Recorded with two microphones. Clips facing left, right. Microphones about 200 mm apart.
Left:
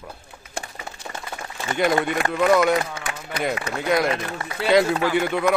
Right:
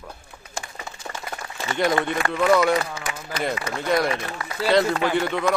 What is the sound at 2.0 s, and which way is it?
Speech, 5° left (ahead or behind).